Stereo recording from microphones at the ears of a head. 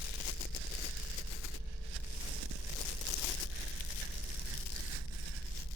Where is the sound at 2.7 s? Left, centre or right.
Left.